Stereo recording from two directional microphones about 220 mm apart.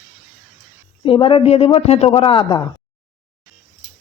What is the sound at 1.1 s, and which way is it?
Speech, 25° left (ahead or behind).